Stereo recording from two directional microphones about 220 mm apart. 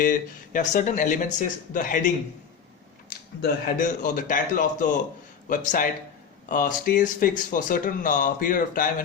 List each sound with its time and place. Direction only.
0.0 s speech: 35° left (ahead or behind)